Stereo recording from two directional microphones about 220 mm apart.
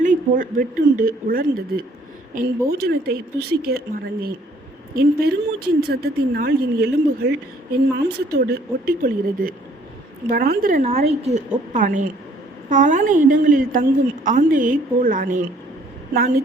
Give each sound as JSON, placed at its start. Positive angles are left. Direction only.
{"t": 0.0, "sound": "a woman's voice", "side_deg": -35}
{"t": 10.8, "sound": "a woman's voice", "side_deg": -30}